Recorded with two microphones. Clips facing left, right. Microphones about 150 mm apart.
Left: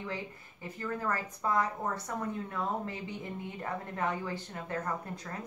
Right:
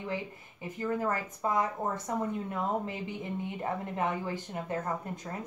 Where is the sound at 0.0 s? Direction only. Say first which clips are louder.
Right 3 dB; 15° right (ahead or behind).